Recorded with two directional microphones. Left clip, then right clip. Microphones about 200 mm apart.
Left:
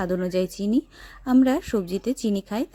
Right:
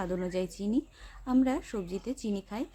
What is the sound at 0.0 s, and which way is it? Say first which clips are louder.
A woman's voice: left 8 dB; 30° left (ahead or behind).